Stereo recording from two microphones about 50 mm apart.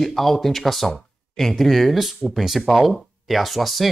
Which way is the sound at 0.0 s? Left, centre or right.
Centre.